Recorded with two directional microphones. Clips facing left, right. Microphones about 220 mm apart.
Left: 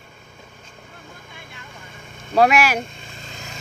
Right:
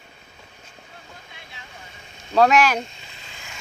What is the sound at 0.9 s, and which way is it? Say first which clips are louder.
Vehicle: left 3 dB; 50° left (ahead or behind).